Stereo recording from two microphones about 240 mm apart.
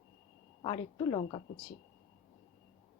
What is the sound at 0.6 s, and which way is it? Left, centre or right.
Speech, centre.